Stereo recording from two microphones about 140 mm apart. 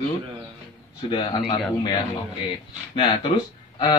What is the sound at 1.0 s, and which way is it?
Speech, 35° left (ahead or behind).